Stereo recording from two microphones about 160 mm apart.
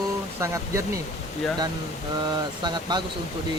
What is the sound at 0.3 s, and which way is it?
Speech, 20° right (ahead or behind).